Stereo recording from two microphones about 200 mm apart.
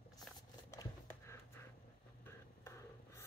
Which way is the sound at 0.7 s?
15° left (ahead or behind).